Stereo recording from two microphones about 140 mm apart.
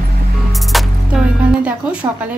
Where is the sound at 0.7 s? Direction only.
Centre (ahead or behind).